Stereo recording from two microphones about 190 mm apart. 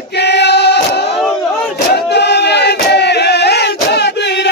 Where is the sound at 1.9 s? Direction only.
60° left (ahead or behind).